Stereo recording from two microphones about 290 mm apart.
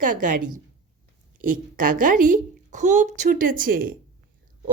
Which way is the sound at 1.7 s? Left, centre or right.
Right.